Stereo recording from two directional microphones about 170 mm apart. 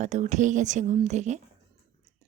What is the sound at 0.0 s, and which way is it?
A woman's voice, 45° right (ahead or behind).